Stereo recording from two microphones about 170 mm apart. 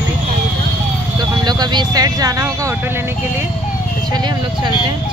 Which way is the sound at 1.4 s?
25° right (ahead or behind).